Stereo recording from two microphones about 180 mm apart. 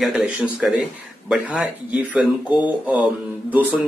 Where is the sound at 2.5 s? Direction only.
25° left (ahead or behind).